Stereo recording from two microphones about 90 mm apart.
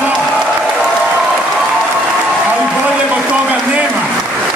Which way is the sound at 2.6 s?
10° right (ahead or behind).